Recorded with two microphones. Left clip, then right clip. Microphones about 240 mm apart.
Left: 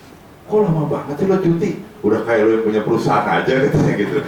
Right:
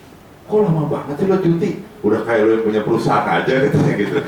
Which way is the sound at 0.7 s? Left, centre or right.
Right.